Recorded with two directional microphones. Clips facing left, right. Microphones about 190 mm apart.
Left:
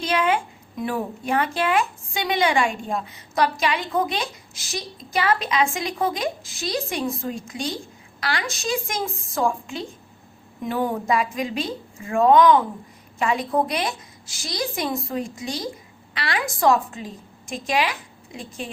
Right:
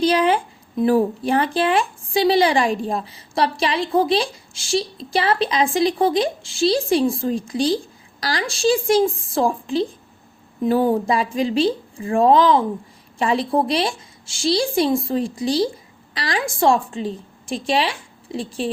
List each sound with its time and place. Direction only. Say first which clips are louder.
0.0 s a woman's voice: right 5 dB; 35° right (ahead or behind)